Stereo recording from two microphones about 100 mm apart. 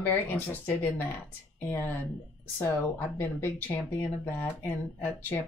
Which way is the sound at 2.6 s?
20° left (ahead or behind).